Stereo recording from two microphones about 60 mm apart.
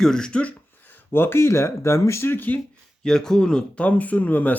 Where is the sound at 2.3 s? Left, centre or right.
Left.